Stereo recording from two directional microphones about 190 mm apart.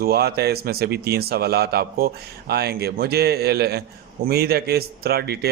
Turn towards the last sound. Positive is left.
turn(degrees=-55)  # may be behind; listen again after turning